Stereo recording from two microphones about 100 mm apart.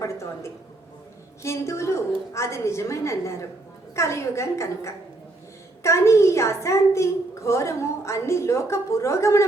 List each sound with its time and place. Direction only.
0.0 s a woman's voice: 30° left (ahead or behind)